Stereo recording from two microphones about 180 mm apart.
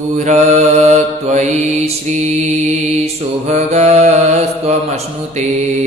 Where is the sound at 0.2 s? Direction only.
40° right (ahead or behind).